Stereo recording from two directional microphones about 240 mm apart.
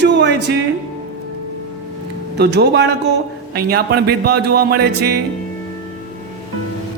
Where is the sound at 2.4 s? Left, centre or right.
Right.